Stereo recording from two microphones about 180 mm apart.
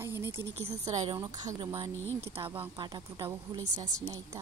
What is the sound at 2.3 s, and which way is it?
A woman's voice, 30° right (ahead or behind).